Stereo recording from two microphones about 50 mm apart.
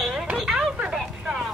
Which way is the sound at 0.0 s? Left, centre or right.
Centre.